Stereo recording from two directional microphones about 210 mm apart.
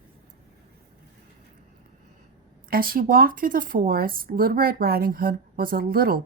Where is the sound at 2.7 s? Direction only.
45° right (ahead or behind).